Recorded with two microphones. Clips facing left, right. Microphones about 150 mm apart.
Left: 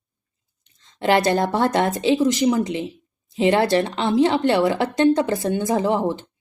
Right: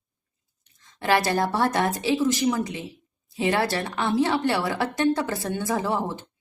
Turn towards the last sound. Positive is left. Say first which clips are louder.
# left 6 dB
turn(degrees=20)  # may be behind; listen again after turning